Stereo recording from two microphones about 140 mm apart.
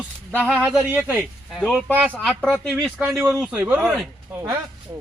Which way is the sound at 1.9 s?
10° right (ahead or behind).